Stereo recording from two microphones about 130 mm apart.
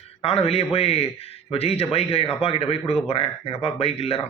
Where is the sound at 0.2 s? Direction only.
45° left (ahead or behind).